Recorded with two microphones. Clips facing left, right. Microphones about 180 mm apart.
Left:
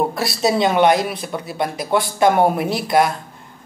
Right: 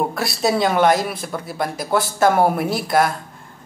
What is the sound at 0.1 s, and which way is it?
Speech, centre (ahead or behind).